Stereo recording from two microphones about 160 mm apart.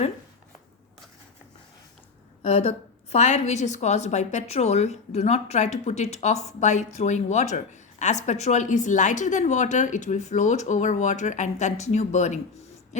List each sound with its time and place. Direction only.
2.4 s a woman's voice: 40° left (ahead or behind)